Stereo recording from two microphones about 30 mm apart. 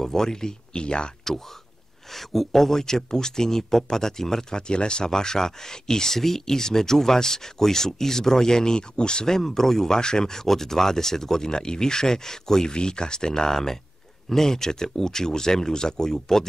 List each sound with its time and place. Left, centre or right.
0.0 s speech: centre
0.8 s speech: left
2.1 s speech: centre; by 5.1 s left
5.1 s speech: left
9.3 s speech: centre
9.9 s speech: left
12.7 s speech: left